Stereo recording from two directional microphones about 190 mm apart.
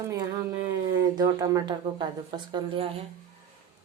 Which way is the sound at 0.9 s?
20° right (ahead or behind).